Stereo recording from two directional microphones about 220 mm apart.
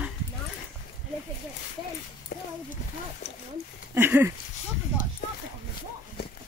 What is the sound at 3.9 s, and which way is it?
Speech, 10° right (ahead or behind).